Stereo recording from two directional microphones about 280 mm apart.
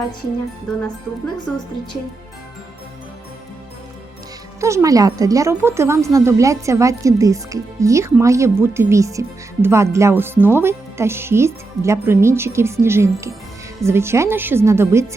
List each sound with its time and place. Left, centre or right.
1.5 s a woman's voice: centre
4.6 s a woman's voice: centre